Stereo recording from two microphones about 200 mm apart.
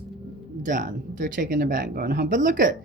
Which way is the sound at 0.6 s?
40° right (ahead or behind).